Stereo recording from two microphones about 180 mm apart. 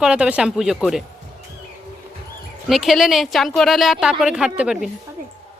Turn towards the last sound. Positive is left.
turn(degrees=-5)  # may be behind; listen again after turning